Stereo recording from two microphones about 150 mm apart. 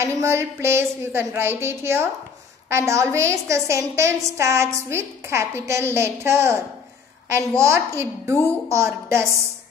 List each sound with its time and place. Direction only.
0.0 s a woman's voice: 20° right (ahead or behind)